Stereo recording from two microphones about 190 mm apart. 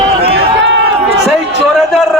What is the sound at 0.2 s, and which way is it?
Run, 30° right (ahead or behind).